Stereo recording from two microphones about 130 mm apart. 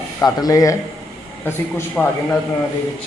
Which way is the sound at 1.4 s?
15° left (ahead or behind).